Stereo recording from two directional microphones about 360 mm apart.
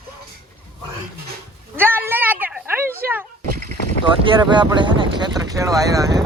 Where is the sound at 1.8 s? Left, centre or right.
Centre.